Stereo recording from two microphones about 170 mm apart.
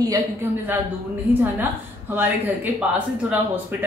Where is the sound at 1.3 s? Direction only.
10° right (ahead or behind).